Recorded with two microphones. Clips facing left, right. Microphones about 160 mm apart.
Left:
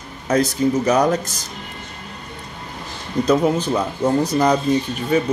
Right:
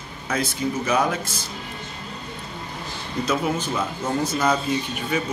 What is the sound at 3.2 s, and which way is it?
Speech, 35° left (ahead or behind).